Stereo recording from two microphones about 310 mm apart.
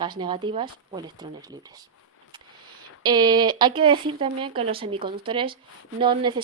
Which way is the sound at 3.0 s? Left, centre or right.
Centre.